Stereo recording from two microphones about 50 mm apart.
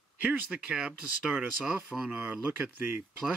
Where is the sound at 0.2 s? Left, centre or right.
Right.